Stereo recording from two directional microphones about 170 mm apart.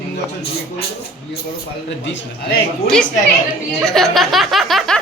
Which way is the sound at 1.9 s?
90° left.